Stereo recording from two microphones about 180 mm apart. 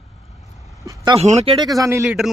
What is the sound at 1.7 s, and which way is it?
Speech, 15° right (ahead or behind).